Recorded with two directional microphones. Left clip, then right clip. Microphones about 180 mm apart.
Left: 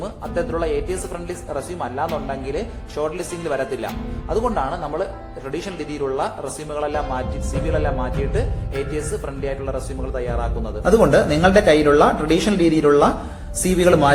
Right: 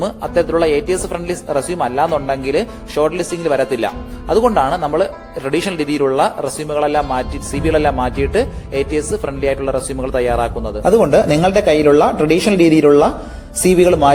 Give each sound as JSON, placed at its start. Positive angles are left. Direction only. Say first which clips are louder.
{"t": 0.0, "sound": "speech", "louder": "right 8 dB", "side_deg": -40}